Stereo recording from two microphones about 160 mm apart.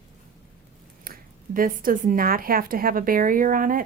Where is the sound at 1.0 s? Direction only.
65° right (ahead or behind).